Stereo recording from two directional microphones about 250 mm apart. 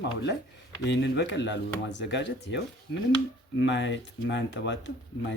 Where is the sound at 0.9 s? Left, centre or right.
Left.